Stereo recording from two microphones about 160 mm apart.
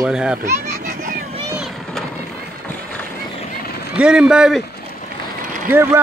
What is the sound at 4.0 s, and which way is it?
Speech, 5° right (ahead or behind).